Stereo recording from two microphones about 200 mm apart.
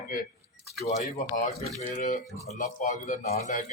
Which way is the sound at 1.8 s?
35° left (ahead or behind).